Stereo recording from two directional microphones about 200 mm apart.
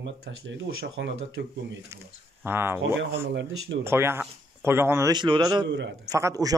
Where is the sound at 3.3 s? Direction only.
65° right (ahead or behind).